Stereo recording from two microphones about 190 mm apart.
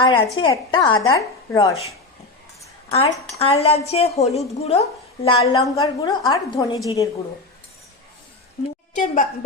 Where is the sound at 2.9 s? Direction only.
30° left (ahead or behind).